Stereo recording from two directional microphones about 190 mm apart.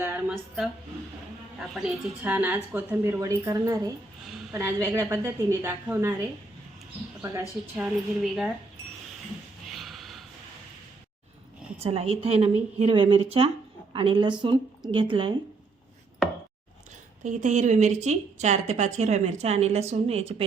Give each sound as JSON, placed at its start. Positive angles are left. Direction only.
{"t": 0.0, "sound": "a sound", "side_deg": -10}
{"t": 1.5, "sound": "a woman's voice", "side_deg": -5}
{"t": 7.8, "sound": "speech", "side_deg": 0}
{"t": 9.6, "sound": "a sound", "side_deg": 0}
{"t": 11.8, "sound": "a woman's voice", "side_deg": -30}
{"t": 17.2, "sound": "a woman's voice", "side_deg": -40}